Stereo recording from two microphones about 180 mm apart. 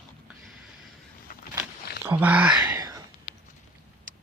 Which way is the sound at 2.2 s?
10° right (ahead or behind).